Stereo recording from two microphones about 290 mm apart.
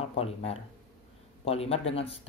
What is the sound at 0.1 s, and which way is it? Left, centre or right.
Speech, left.